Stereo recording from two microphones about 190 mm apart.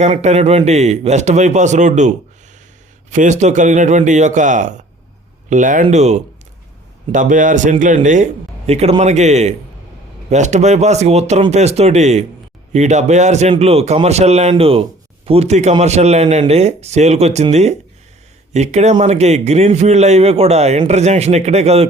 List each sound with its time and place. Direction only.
0.0 s a man's voice: 35° right (ahead or behind)